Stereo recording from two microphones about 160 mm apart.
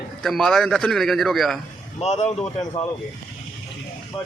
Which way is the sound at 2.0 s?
45° left (ahead or behind).